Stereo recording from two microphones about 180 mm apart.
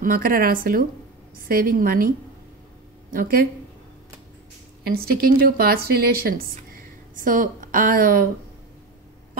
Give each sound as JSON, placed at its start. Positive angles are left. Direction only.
{"t": 0.0, "sound": "speech", "side_deg": -55}
{"t": 3.1, "sound": "speech", "side_deg": -50}
{"t": 4.8, "sound": "a woman's voice", "side_deg": -55}